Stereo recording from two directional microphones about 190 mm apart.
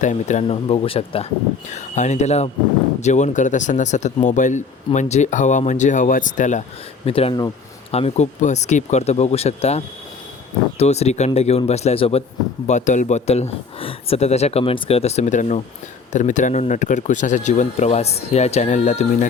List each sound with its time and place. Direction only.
0.0 s speech: 40° left (ahead or behind)